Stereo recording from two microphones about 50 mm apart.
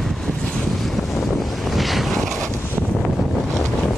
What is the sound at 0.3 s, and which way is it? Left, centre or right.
Wind noise, centre.